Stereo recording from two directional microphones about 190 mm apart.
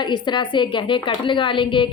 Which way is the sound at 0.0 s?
25° left (ahead or behind).